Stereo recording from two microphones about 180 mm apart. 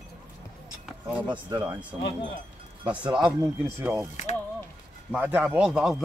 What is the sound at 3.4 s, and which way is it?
Speech, 10° right (ahead or behind).